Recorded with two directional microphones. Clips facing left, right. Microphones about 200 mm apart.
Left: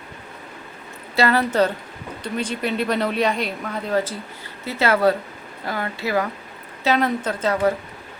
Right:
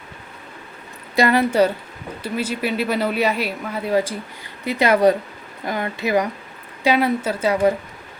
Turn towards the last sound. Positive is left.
turn(degrees=-10)  # may be behind; listen again after turning